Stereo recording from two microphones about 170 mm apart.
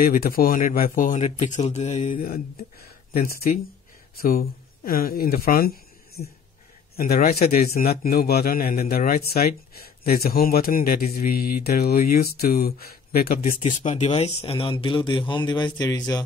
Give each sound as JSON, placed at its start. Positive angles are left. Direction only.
{"t": 0.0, "sound": "a man's voice", "side_deg": 60}
{"t": 13.8, "sound": "a man's voice", "side_deg": 40}